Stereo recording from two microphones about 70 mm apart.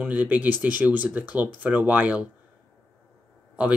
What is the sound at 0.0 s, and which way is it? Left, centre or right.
Speech, right.